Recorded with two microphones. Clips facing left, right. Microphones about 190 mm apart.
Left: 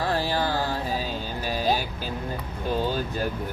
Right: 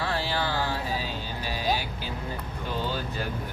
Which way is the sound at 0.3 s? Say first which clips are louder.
Left 3 dB; 45° left (ahead or behind).